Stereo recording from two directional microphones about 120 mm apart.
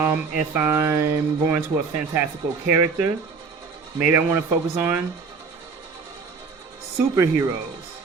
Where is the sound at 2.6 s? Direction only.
20° right (ahead or behind).